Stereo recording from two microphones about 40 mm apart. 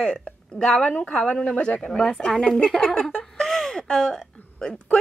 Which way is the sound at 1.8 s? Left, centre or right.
Centre.